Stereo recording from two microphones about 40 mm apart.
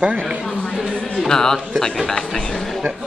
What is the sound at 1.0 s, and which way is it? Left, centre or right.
Music, left.